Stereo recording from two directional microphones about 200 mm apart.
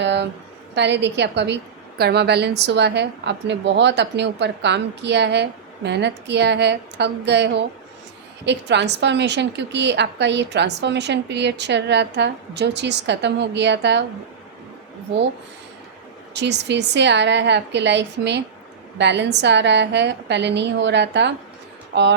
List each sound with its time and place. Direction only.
0.0 s a sound: 60° right (ahead or behind)
0.8 s a woman's voice: 60° right (ahead or behind)
16.3 s a woman's voice: 60° right (ahead or behind)